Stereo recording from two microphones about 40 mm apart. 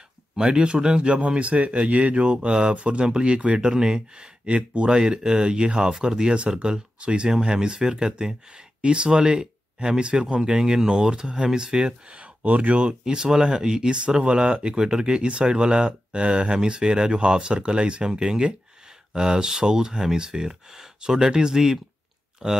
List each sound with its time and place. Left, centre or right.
0.4 s speech: right
4.9 s speech: centre
7.2 s speech: centre
12.2 s speech: right
13.0 s speech: centre